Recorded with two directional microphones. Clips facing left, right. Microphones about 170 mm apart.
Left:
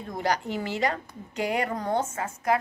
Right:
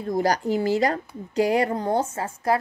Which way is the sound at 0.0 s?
35° right (ahead or behind).